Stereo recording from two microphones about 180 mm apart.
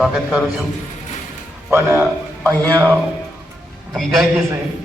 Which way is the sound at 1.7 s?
15° right (ahead or behind).